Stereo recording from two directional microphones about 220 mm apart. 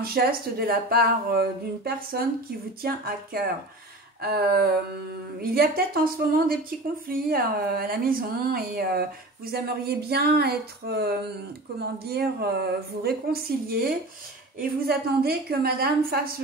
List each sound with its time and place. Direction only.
0.0 s a woman's voice: 45° right (ahead or behind)